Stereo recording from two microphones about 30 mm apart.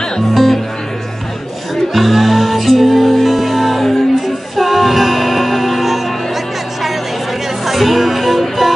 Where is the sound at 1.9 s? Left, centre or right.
Centre.